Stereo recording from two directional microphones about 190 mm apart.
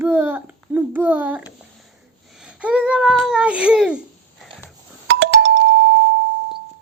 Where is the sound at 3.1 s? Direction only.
5° right (ahead or behind).